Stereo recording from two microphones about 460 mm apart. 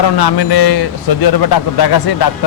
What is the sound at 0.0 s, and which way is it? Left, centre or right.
Speech, left.